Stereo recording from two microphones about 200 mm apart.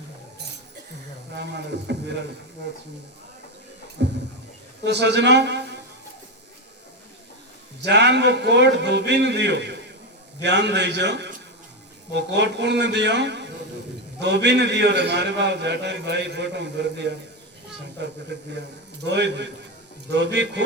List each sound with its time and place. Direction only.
1.4 s a man's voice: 60° right (ahead or behind)
4.0 s a sound: 55° right (ahead or behind)
4.9 s a man's voice: 60° right (ahead or behind)
7.8 s a man's voice: 60° right (ahead or behind)